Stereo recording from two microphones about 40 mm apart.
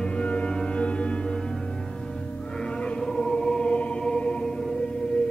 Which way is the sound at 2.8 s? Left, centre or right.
Left.